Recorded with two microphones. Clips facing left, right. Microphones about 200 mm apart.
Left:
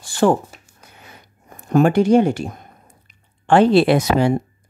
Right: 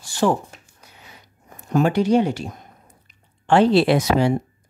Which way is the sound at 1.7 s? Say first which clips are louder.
Left 4 dB; 50° left (ahead or behind).